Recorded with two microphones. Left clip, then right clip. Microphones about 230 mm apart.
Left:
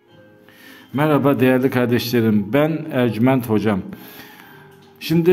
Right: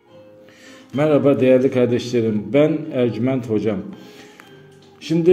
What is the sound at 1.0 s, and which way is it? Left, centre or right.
A man's voice, left.